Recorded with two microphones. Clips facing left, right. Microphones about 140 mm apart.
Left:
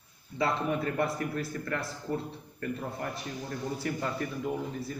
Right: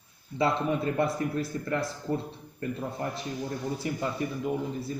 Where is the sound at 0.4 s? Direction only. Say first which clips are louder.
Right 3 dB; 25° right (ahead or behind).